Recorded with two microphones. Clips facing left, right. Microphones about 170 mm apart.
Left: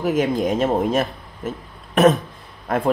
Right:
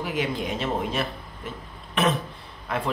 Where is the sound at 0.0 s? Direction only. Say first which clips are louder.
Left 8 dB; 45° left (ahead or behind).